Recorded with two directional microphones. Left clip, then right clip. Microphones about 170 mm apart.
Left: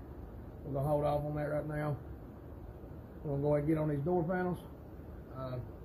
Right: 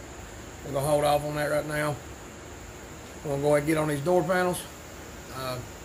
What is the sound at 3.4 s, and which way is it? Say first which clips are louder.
Speech: right 8 dB; 20° right (ahead or behind).